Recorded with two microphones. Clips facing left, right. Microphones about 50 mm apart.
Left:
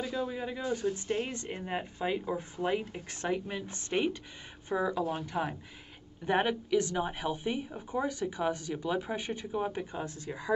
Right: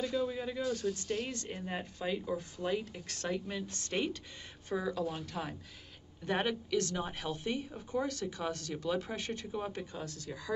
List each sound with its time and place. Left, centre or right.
0.0 s a woman's voice: centre